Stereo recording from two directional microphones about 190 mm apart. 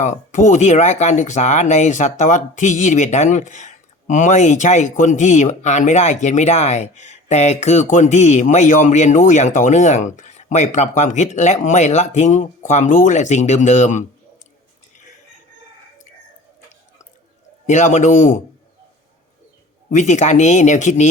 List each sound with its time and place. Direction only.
0.0 s speech: 40° left (ahead or behind)
17.7 s speech: 40° left (ahead or behind)
19.9 s speech: 40° left (ahead or behind)